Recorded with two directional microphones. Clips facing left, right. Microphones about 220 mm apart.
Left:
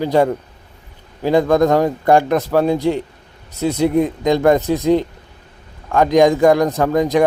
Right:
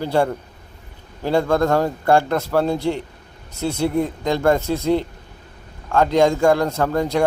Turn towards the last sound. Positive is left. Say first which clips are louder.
# left 4 dB
turn(degrees=15)  # may be behind; listen again after turning